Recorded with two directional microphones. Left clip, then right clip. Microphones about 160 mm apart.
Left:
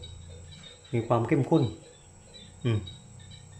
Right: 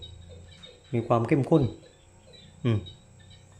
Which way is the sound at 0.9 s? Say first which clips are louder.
Right 2 dB; 25° right (ahead or behind).